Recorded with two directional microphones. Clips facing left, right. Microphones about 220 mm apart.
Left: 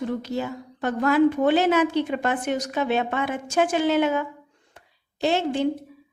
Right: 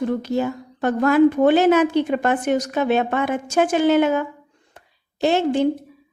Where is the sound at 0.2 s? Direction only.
50° right (ahead or behind).